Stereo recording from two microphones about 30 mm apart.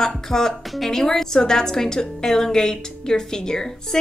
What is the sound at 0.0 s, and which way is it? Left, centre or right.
Music, centre.